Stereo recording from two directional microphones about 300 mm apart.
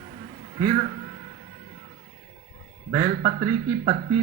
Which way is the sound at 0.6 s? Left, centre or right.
Centre.